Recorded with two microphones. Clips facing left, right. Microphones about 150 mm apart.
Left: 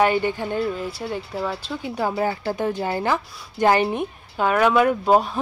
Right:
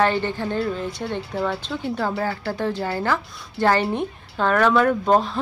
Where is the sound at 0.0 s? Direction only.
10° left (ahead or behind).